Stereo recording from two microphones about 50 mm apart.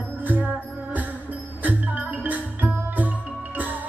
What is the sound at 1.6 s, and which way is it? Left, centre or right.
Music, right.